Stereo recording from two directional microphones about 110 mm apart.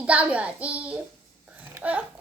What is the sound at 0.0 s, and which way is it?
A child's voice, 10° right (ahead or behind).